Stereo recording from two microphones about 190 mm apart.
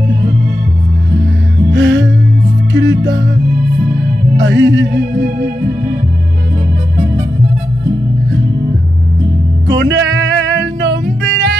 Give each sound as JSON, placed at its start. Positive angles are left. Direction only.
{"t": 1.7, "sound": "music", "side_deg": -70}
{"t": 4.4, "sound": "music", "side_deg": -70}
{"t": 9.7, "sound": "music", "side_deg": -70}